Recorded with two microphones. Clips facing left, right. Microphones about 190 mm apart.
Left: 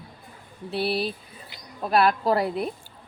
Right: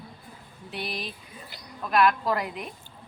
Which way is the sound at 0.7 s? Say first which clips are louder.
Left 9 dB; 35° left (ahead or behind).